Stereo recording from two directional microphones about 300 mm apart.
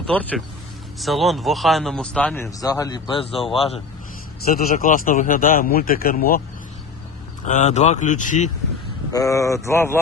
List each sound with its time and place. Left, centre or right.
0.1 s speech: centre
4.4 s speech: left
7.4 s speech: left
9.1 s speech: centre